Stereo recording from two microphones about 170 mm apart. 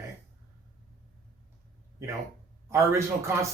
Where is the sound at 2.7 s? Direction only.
15° right (ahead or behind).